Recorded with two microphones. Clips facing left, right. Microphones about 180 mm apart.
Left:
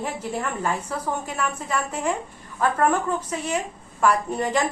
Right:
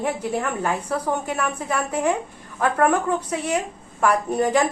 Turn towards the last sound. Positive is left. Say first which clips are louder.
# right 4 dB
turn(degrees=-60)  # may be behind; listen again after turning